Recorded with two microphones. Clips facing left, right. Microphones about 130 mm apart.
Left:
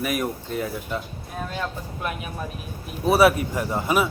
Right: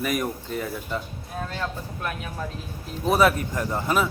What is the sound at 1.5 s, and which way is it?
Speech, 15° left (ahead or behind).